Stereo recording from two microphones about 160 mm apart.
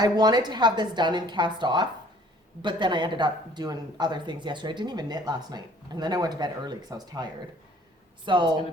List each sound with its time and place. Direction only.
0.0 s speech: 25° right (ahead or behind)